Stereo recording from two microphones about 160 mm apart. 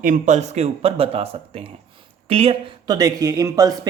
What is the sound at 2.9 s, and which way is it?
Speech, 20° right (ahead or behind).